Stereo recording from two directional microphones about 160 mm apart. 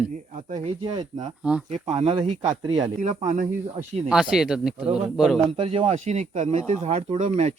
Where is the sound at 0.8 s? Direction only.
30° right (ahead or behind).